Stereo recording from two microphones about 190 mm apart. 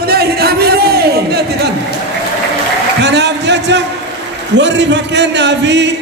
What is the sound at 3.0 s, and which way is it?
A man's voice, 65° right (ahead or behind).